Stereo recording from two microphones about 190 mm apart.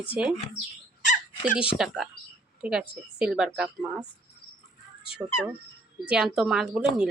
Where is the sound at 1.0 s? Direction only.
40° left (ahead or behind).